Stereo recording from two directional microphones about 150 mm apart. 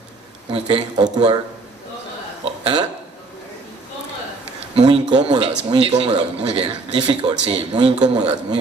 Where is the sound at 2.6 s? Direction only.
30° right (ahead or behind).